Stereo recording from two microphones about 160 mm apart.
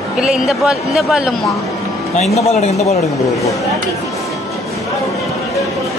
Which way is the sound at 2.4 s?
40° left (ahead or behind).